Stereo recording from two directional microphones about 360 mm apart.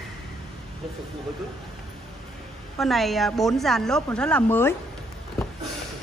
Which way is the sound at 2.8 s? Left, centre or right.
Centre.